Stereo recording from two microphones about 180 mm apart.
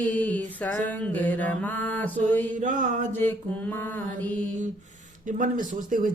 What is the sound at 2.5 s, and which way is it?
Speech, 45° right (ahead or behind).